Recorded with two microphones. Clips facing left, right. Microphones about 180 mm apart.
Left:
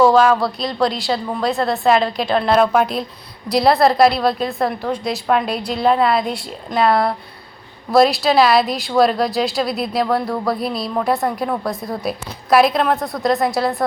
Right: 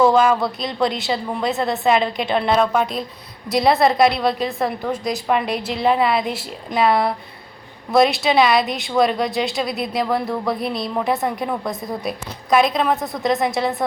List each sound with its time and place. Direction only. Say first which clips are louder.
0.3 s speech: left 2 dB; 20° right (ahead or behind)
1.8 s speech: left 2 dB; centre (ahead or behind)